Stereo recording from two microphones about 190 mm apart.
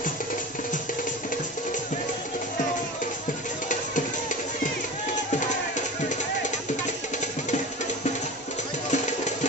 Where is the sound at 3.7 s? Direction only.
40° left (ahead or behind).